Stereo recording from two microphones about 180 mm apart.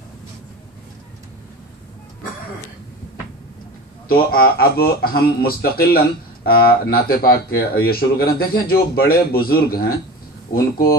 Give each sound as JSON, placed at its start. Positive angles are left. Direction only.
{"t": 4.1, "sound": "speech", "side_deg": 55}